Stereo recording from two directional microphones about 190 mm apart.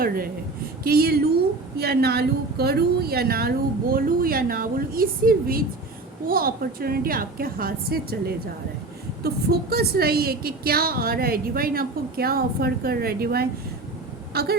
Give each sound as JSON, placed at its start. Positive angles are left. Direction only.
{"t": 0.9, "sound": "a woman's voice", "side_deg": -55}